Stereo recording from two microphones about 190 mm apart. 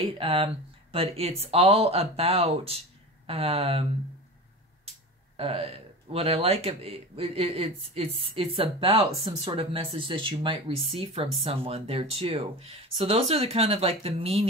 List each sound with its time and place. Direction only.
0.2 s speech: 30° right (ahead or behind)
5.4 s speech: 30° right (ahead or behind)